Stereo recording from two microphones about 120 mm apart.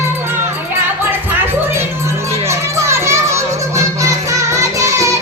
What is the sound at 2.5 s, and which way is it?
Music, 25° right (ahead or behind).